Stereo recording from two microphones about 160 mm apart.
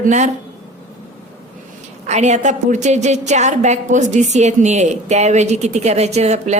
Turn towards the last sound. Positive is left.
turn(degrees=-45)  # may be behind; listen again after turning